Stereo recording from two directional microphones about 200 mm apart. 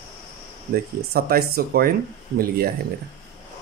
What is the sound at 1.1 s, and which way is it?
Speech, 50° right (ahead or behind).